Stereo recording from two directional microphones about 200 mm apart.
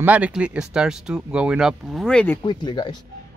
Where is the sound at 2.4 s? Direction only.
25° left (ahead or behind).